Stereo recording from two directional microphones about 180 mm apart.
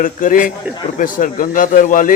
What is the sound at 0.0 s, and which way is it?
Speech, 50° left (ahead or behind).